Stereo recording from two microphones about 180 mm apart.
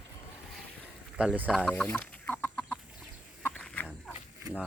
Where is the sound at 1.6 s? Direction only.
5° left (ahead or behind).